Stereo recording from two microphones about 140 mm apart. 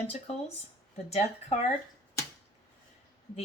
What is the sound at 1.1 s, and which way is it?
Speech, 50° left (ahead or behind).